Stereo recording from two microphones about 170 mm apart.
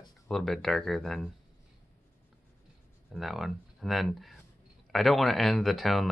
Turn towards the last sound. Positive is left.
turn(degrees=0)  # may be behind; listen again after turning